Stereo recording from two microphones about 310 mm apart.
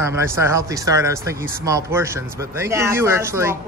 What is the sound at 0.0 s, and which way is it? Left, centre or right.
Speech, centre.